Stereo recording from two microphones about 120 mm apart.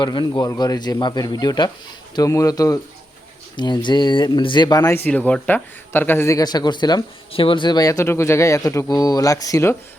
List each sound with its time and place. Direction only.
0.0 s speech: 40° left (ahead or behind)
4.9 s speech: 15° left (ahead or behind); by 7.0 s 35° left (ahead or behind)
7.3 s speech: 45° left (ahead or behind); by 9.7 s 25° left (ahead or behind)